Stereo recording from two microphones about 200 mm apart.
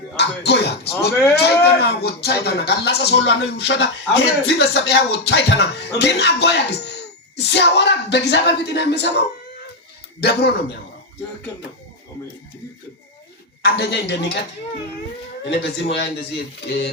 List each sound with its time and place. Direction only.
0.2 s a man's voice: 55° left (ahead or behind)
13.7 s speech: 55° left (ahead or behind)
15.4 s speech: 60° left (ahead or behind)